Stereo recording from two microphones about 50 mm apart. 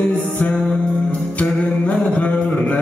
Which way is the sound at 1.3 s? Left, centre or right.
Left.